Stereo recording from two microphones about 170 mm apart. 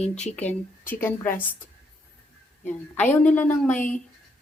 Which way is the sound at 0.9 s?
10° left (ahead or behind).